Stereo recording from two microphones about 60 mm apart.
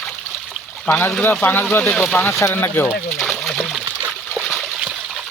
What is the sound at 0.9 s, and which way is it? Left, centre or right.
Speech, left.